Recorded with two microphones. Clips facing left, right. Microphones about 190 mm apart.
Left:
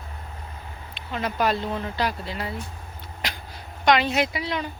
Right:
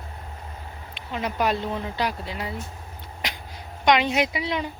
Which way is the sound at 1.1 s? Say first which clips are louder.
Even; 15° right (ahead or behind).